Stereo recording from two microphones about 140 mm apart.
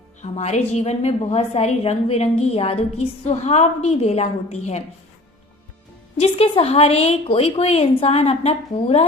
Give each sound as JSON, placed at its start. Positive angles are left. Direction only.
{"t": 0.2, "sound": "a woman's voice", "side_deg": 55}
{"t": 6.1, "sound": "a woman's voice", "side_deg": 45}